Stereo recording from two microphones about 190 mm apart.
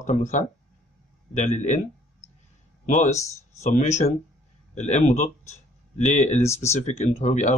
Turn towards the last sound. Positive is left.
turn(degrees=35)  # may be behind; listen again after turning